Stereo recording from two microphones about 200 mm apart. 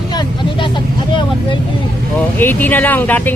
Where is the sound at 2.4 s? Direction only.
10° left (ahead or behind).